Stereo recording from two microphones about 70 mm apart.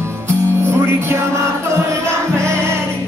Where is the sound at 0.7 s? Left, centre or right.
Right.